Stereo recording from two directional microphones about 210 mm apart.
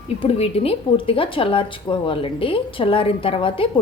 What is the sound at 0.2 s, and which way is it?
A woman's voice, 25° left (ahead or behind).